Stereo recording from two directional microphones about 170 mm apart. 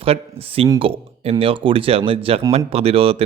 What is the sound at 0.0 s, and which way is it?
Speech, 35° right (ahead or behind).